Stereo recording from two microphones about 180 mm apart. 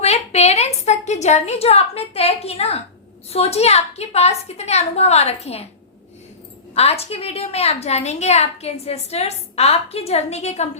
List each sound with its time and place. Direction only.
0.0 s a woman's voice: 35° left (ahead or behind)
6.7 s a woman's voice: 35° left (ahead or behind)